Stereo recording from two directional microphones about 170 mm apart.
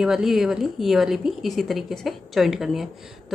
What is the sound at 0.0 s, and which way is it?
A woman's voice, 5° right (ahead or behind).